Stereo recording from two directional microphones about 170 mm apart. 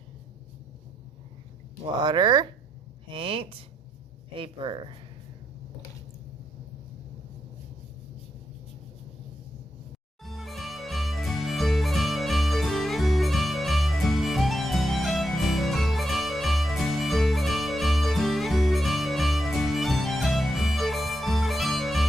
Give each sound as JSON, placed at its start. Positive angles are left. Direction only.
{"t": 2.0, "sound": "speech", "side_deg": -25}
{"t": 10.2, "sound": "music", "side_deg": 0}